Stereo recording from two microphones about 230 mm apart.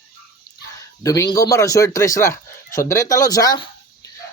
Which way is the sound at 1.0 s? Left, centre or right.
Centre.